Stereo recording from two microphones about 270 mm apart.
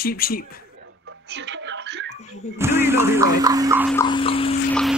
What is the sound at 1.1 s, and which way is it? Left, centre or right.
Music, right.